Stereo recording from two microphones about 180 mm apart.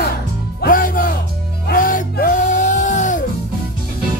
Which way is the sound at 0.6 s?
50° left (ahead or behind).